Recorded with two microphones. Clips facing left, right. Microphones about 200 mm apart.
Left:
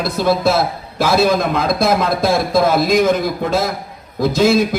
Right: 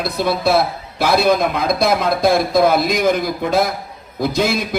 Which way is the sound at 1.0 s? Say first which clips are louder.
Even; 60° right (ahead or behind).